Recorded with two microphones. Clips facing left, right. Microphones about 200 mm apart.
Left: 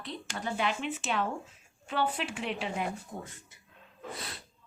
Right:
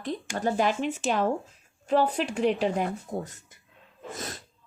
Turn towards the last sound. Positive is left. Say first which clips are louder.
# right 4 dB
turn(degrees=-45)  # may be behind; listen again after turning